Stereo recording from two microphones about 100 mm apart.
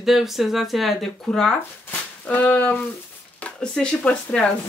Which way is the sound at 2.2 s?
15° left (ahead or behind).